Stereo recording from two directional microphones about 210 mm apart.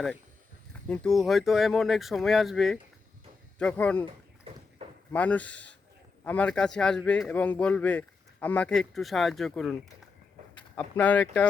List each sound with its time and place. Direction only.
0.9 s a man's voice: centre (ahead or behind)
4.8 s a sound: 30° right (ahead or behind)
5.1 s a man's voice: 5° left (ahead or behind)
10.8 s speech: 5° left (ahead or behind)